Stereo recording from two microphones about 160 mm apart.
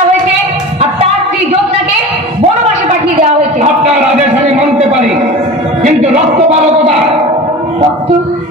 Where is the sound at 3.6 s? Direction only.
40° right (ahead or behind).